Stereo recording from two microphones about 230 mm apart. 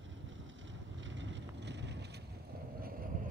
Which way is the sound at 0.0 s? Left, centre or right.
Right.